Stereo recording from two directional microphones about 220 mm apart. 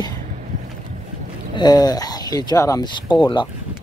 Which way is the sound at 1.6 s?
15° left (ahead or behind).